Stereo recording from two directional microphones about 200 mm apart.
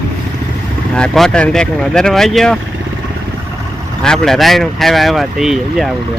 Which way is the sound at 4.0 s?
5° left (ahead or behind).